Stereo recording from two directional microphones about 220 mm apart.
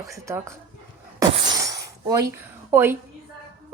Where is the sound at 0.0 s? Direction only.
15° right (ahead or behind).